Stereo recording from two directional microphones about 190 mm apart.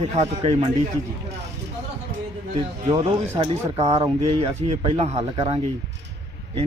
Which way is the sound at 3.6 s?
15° right (ahead or behind).